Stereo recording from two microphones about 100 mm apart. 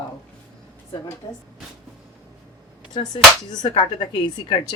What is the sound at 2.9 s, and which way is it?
Speech, 45° left (ahead or behind).